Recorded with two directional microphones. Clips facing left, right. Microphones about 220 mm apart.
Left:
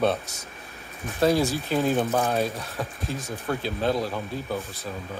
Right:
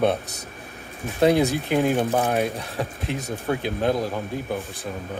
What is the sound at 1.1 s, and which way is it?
Speech, 20° right (ahead or behind).